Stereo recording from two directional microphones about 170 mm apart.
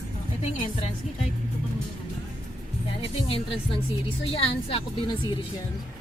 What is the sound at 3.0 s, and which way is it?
Speech, 35° left (ahead or behind).